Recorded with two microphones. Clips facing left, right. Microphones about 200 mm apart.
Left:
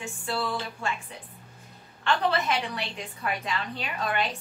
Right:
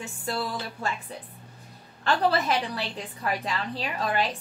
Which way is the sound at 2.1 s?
35° right (ahead or behind).